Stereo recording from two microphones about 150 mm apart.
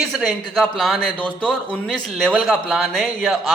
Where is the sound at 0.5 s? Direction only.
Centre (ahead or behind).